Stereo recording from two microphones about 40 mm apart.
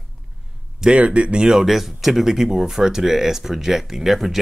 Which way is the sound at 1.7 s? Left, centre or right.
Centre.